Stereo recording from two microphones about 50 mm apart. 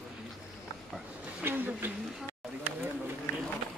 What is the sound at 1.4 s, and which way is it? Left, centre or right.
Speech, right.